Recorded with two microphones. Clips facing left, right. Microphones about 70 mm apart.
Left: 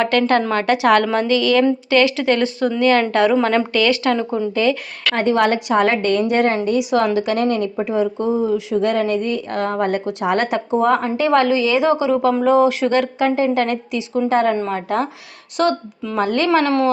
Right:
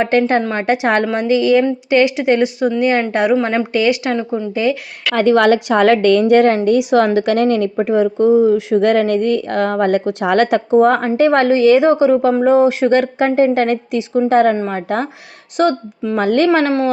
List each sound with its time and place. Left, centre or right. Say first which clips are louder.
0.0 s speech: right 2 dB; right
5.2 s a woman's voice: right 5 dB; right
10.8 s a woman's voice: right 5 dB; right
16.1 s a woman's voice: right 3 dB; right